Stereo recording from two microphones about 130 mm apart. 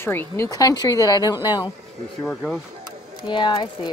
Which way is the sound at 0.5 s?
30° left (ahead or behind).